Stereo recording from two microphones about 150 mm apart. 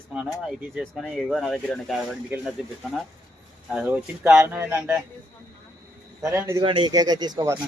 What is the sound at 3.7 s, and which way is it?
Speech, 10° right (ahead or behind).